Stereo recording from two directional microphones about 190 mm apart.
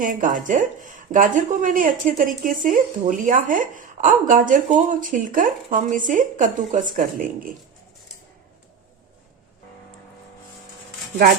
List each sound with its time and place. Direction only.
0.0 s speech: 45° right (ahead or behind)